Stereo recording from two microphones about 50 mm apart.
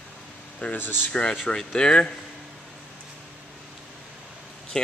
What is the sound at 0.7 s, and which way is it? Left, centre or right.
Speech, left.